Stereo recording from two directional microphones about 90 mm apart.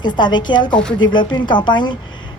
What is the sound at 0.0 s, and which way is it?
Speech, 55° left (ahead or behind).